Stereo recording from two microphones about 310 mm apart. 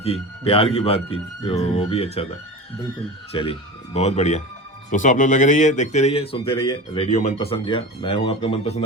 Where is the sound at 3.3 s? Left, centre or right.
Centre.